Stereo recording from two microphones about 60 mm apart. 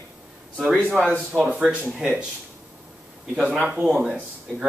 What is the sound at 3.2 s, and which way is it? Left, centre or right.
Speech, centre.